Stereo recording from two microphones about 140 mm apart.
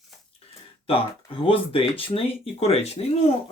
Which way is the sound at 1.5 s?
40° left (ahead or behind).